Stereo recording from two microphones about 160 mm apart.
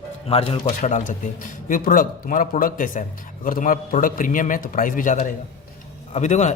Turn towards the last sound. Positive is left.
turn(degrees=45)  # may be behind; listen again after turning